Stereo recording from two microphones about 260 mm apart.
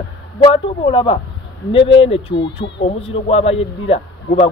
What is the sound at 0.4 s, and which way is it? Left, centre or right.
Speech, centre.